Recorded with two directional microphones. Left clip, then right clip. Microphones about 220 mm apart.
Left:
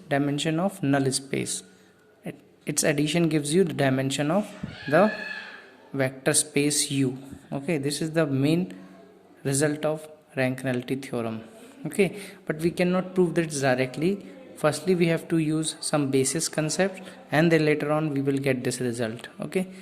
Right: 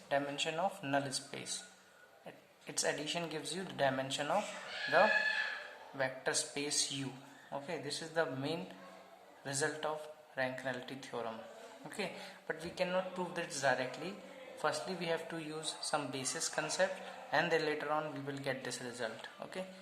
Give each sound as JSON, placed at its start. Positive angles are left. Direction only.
{"t": 0.1, "sound": "speech", "side_deg": 40}
{"t": 6.0, "sound": "speech", "side_deg": 45}
{"t": 12.5, "sound": "speech", "side_deg": 45}